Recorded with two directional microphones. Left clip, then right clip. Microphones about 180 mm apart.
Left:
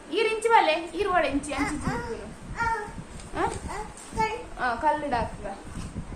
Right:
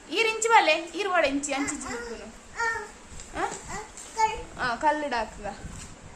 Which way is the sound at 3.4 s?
15° right (ahead or behind).